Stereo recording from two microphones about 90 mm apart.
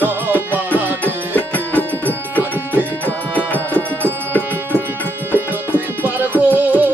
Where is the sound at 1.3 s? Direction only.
20° left (ahead or behind).